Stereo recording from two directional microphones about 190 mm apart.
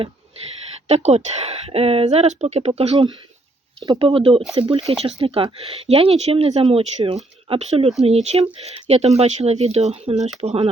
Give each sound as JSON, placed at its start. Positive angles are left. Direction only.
{"t": 0.9, "sound": "speech", "side_deg": -35}